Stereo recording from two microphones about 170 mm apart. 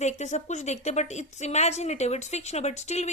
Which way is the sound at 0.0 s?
40° left (ahead or behind).